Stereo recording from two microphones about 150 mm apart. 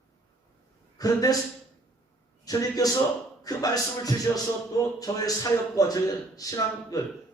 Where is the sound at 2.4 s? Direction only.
25° left (ahead or behind).